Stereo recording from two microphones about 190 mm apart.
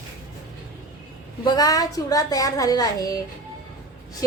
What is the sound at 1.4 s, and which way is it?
A child's voice, 20° left (ahead or behind).